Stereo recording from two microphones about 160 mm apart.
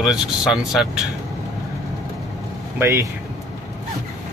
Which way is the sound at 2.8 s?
20° right (ahead or behind).